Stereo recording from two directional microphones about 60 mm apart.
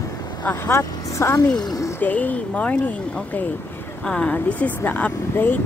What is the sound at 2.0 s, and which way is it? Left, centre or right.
Speech, left.